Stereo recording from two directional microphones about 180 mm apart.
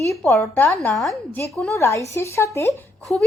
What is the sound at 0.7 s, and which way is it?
A woman's voice, centre (ahead or behind).